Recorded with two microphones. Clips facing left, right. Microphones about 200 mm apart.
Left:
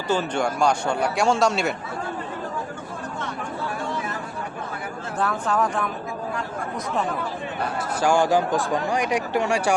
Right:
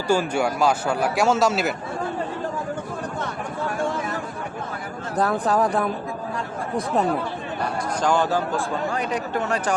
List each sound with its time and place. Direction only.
0.1 s a man's voice: 10° right (ahead or behind)
5.1 s speech: 35° right (ahead or behind)
8.0 s speech: 10° left (ahead or behind)